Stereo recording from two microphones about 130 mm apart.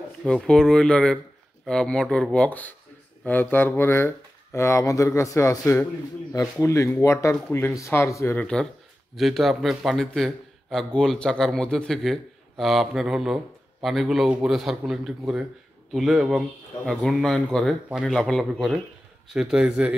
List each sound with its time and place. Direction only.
0.2 s a man's voice: 5° left (ahead or behind); by 8.4 s 20° left (ahead or behind)
8.4 s a man's voice: 5° left (ahead or behind)